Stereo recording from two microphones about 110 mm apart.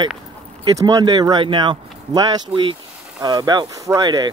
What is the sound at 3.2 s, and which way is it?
Speech, 40° right (ahead or behind).